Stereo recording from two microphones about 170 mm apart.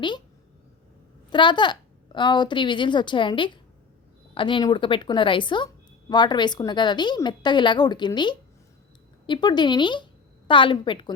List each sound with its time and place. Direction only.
1.3 s a woman's voice: 25° left (ahead or behind)